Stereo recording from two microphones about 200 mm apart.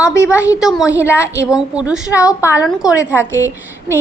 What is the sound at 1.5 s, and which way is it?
Speech, 5° right (ahead or behind).